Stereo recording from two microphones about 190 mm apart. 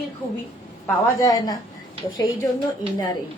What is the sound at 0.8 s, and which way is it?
Speech, 20° left (ahead or behind).